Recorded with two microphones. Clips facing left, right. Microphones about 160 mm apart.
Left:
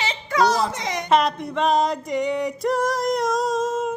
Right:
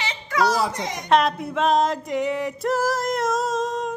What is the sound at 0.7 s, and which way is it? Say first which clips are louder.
Speech: left 2 dB; 80° left.